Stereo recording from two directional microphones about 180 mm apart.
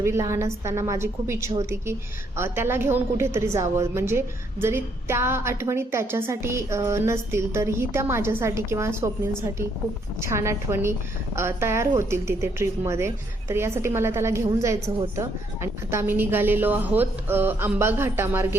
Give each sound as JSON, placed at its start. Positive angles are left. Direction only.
{"t": 0.0, "sound": "a woman's voice", "side_deg": -15}